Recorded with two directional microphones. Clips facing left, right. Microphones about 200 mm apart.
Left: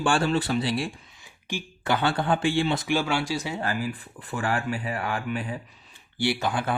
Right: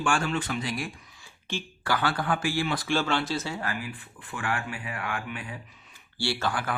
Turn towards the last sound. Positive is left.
turn(degrees=25)  # may be behind; listen again after turning